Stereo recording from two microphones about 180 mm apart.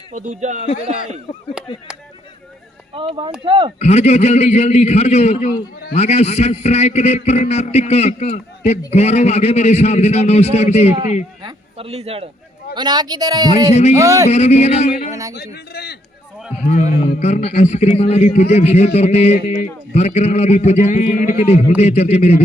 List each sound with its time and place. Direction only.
0.1 s speech: 40° right (ahead or behind)
2.9 s a man's voice: 30° right (ahead or behind)
3.8 s a man's voice: 35° left (ahead or behind)
11.4 s a man's voice: 35° right (ahead or behind)
12.7 s a man's voice: 25° right (ahead or behind)
14.3 s a man's voice: 35° left (ahead or behind)
15.1 s a man's voice: 15° right (ahead or behind)
15.4 s a man's voice: 65° left (ahead or behind)
16.6 s a man's voice: 35° left (ahead or behind)